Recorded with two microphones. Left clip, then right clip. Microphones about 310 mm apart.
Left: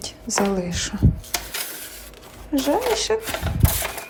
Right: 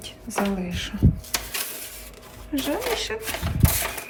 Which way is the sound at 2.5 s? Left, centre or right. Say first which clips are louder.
Left 5 dB; centre.